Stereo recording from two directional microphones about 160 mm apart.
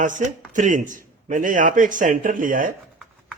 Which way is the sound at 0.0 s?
50° right (ahead or behind).